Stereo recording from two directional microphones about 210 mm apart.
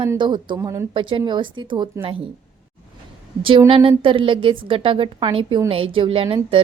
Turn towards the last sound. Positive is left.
turn(degrees=-25)  # may be behind; listen again after turning